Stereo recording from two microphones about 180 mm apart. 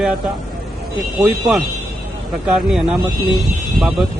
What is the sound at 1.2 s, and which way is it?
Speech, 5° right (ahead or behind).